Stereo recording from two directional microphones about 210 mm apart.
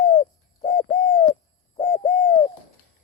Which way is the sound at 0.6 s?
40° left (ahead or behind).